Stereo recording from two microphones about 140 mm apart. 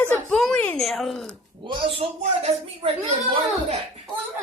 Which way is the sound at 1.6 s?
40° right (ahead or behind).